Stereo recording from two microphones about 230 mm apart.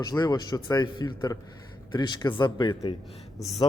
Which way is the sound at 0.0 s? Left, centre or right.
Centre.